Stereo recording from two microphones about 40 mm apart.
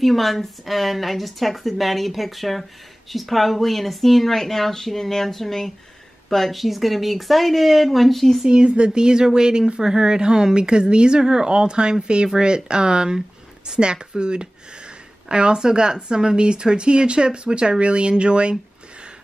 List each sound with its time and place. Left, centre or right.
0.0 s speech: centre
8.5 s speech: right